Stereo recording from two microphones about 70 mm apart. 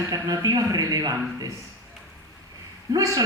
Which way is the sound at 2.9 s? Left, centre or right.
Right.